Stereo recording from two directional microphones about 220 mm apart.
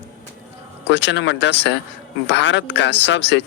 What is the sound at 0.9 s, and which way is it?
Speech, 55° left (ahead or behind).